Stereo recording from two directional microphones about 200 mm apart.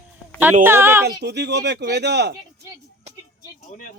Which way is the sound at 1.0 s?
55° right (ahead or behind).